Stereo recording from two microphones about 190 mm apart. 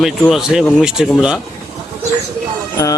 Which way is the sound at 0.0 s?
5° right (ahead or behind).